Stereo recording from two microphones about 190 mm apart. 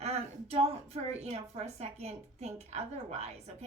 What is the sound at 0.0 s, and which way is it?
A woman's voice, 35° right (ahead or behind).